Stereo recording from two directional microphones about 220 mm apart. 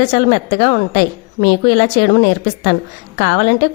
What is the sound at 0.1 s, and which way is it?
A woman's voice, 45° left (ahead or behind).